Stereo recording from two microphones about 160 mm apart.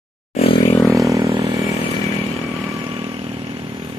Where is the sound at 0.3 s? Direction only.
40° left (ahead or behind).